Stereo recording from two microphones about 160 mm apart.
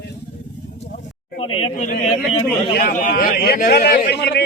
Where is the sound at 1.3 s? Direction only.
35° left (ahead or behind).